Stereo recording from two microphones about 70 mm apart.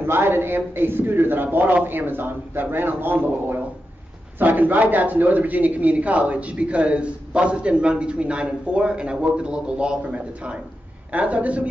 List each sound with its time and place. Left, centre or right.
0.0 s a man's voice: right; by 11.6 s centre